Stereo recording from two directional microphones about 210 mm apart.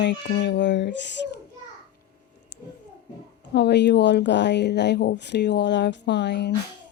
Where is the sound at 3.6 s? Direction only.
55° left (ahead or behind).